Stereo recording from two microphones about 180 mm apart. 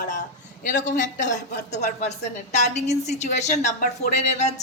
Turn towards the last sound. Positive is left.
turn(degrees=40)  # may be behind; listen again after turning